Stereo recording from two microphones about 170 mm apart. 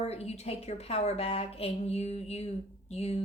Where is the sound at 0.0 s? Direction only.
40° left (ahead or behind).